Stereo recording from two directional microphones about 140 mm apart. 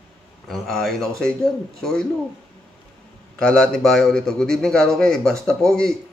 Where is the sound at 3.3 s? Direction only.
5° left (ahead or behind).